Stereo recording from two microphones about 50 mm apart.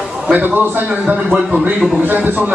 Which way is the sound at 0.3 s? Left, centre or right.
Right.